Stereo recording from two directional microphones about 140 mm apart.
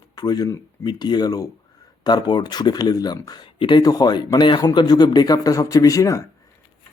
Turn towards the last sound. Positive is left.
turn(degrees=25)  # may be behind; listen again after turning